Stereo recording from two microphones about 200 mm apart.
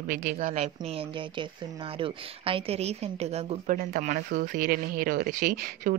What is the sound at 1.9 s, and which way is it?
A woman's voice, 25° right (ahead or behind).